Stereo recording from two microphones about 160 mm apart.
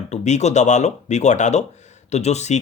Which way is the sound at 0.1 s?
45° left (ahead or behind).